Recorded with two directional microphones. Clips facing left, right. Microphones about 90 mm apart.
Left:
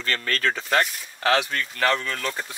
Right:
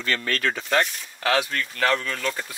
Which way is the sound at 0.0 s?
40° left (ahead or behind).